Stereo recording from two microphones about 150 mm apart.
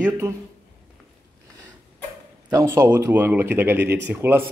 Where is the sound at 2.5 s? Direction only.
20° right (ahead or behind).